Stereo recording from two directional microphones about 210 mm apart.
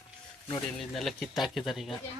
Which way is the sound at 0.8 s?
Centre (ahead or behind).